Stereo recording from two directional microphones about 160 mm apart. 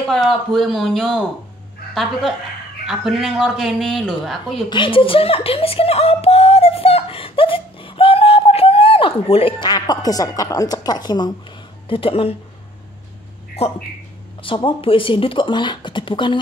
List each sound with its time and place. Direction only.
0.1 s speech: centre (ahead or behind)
2.9 s speech: centre (ahead or behind)
4.6 s speech: 30° left (ahead or behind)
11.9 s speech: 35° left (ahead or behind)
13.6 s speech: 40° left (ahead or behind)